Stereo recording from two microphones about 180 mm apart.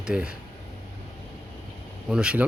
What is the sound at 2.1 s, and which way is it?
Speech, 5° right (ahead or behind).